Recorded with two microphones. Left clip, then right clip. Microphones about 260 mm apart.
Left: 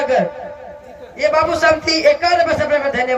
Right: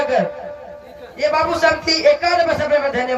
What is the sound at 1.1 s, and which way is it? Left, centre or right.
A man's voice, centre.